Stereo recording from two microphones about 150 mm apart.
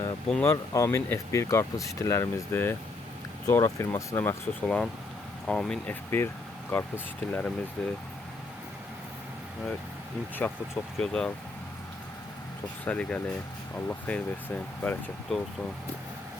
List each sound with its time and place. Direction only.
0.4 s speech: 20° left (ahead or behind)
10.4 s speech: 15° left (ahead or behind)
12.8 s speech: 10° left (ahead or behind)